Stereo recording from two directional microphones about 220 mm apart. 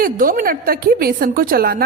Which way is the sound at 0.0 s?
40° right (ahead or behind).